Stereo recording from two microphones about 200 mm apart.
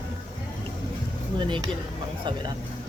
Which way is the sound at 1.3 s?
25° right (ahead or behind).